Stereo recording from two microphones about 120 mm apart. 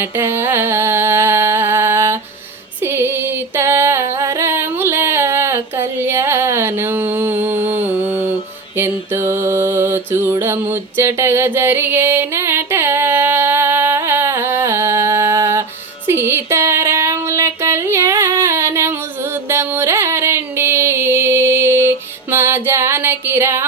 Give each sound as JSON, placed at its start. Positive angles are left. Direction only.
{"t": 0.0, "sound": "a sound", "side_deg": -20}
{"t": 2.8, "sound": "female singing", "side_deg": -20}
{"t": 8.7, "sound": "mantra", "side_deg": -20}
{"t": 16.0, "sound": "music", "side_deg": -20}